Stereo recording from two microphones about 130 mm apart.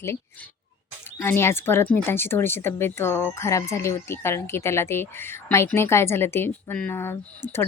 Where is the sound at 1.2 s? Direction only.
20° left (ahead or behind).